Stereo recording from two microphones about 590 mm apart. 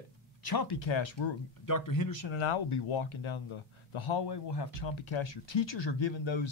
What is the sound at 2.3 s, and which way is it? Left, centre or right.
Speech, left.